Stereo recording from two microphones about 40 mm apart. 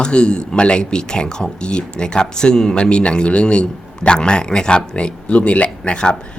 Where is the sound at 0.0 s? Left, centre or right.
Left.